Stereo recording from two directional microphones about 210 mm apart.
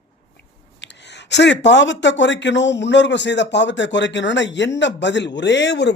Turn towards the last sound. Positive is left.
turn(degrees=55)  # may be behind; listen again after turning